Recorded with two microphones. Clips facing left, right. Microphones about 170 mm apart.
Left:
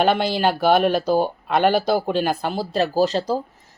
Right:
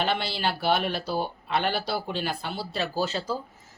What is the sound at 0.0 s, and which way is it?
Speech, 50° left (ahead or behind).